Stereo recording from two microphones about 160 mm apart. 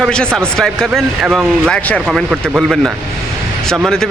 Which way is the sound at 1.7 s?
5° left (ahead or behind).